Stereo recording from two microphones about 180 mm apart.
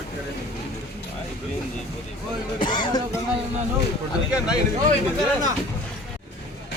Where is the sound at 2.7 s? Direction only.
25° left (ahead or behind).